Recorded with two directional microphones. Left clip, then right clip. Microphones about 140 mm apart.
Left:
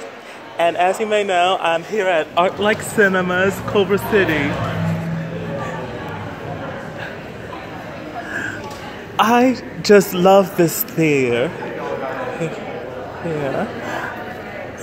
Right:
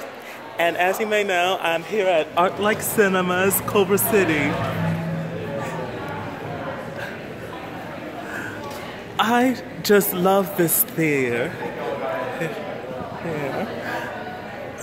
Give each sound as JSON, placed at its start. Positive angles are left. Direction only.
{"t": 0.6, "sound": "speech", "side_deg": 0}
{"t": 9.1, "sound": "a man's voice", "side_deg": 15}